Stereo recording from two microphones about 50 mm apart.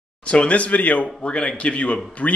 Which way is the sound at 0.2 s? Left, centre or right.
Left.